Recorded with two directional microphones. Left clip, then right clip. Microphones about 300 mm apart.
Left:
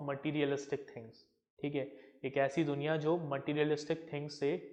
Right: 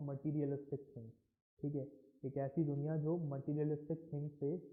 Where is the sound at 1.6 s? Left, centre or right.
Left.